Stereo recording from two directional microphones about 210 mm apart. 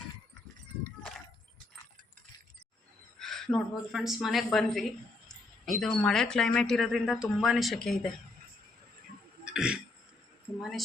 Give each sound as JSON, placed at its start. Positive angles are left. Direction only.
{"t": 3.2, "sound": "a woman's voice", "side_deg": 0}
{"t": 9.4, "sound": "a sound", "side_deg": -5}
{"t": 10.6, "sound": "speech", "side_deg": 0}